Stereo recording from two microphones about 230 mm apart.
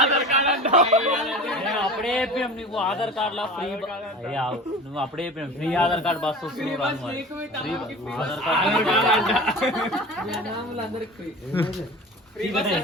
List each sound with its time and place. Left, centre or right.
0.1 s a sound: right
1.3 s a man's voice: centre
8.1 s a man's voice: centre
12.4 s a man's voice: centre